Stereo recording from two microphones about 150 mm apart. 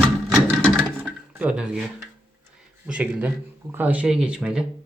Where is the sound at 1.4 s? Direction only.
10° right (ahead or behind).